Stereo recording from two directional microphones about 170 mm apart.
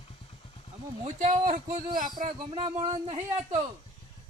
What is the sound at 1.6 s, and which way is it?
Speech, 25° right (ahead or behind).